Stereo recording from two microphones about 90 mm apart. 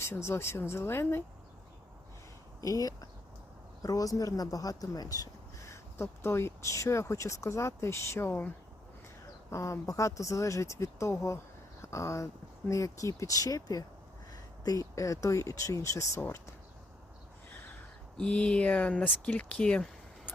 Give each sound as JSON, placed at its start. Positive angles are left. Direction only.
{"t": 0.0, "sound": "speech", "side_deg": 30}
{"t": 2.6, "sound": "speech", "side_deg": 40}
{"t": 9.5, "sound": "speech", "side_deg": 35}
{"t": 18.2, "sound": "speech", "side_deg": 10}